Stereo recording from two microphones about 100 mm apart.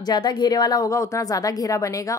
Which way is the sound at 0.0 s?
45° left (ahead or behind).